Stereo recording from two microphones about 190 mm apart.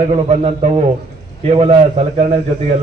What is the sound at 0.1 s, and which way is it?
A man's voice, 35° right (ahead or behind).